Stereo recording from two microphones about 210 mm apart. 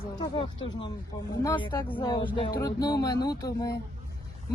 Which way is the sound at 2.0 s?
20° left (ahead or behind).